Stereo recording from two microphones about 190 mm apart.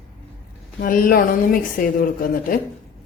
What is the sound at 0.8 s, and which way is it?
Speech, 50° left (ahead or behind).